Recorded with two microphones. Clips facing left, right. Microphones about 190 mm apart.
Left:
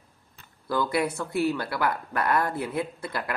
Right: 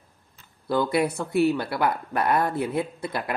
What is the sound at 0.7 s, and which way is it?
Speech, 25° right (ahead or behind).